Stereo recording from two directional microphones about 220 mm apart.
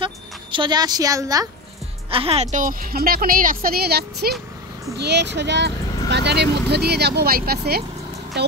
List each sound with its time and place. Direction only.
0.0 s a woman's voice: 20° right (ahead or behind); by 7.8 s 45° right (ahead or behind)